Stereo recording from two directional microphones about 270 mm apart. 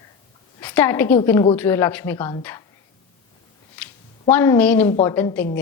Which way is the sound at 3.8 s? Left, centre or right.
Centre.